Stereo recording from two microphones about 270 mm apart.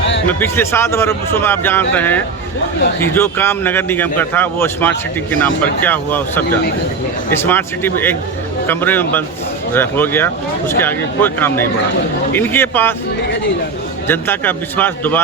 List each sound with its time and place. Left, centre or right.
0.0 s music: left
0.3 s a man's voice: centre
14.1 s a man's voice: centre